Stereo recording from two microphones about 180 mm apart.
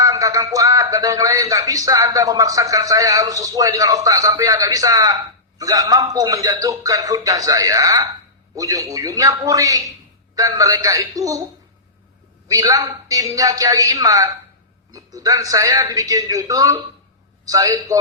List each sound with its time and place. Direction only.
0.0 s speech: 20° right (ahead or behind)
12.5 s speech: 20° right (ahead or behind)